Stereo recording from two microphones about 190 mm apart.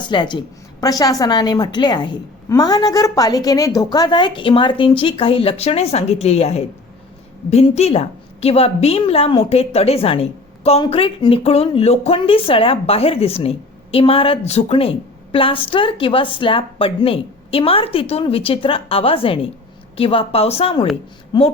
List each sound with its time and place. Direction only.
0.0 s a woman's voice: 25° left (ahead or behind)